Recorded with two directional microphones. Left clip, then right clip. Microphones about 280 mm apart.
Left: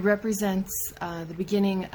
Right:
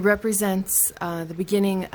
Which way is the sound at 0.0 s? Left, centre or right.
Right.